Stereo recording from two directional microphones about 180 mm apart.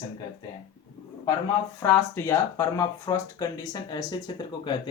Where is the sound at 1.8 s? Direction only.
15° left (ahead or behind).